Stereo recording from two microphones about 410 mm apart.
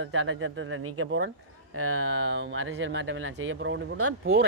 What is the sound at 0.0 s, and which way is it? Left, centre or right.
Speech, right.